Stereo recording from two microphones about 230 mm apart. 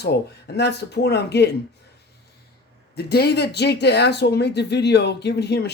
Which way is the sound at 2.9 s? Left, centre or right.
Left.